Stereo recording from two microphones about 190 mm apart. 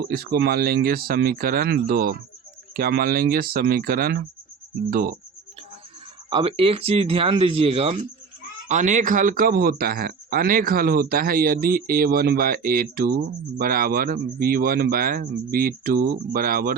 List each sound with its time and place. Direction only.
0.0 s speech: 55° right (ahead or behind)
6.3 s speech: 30° right (ahead or behind); by 16.7 s 50° right (ahead or behind)